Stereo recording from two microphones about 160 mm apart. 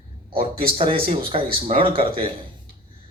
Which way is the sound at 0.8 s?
35° right (ahead or behind).